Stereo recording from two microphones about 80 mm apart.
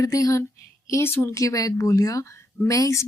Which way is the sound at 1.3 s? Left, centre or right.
Left.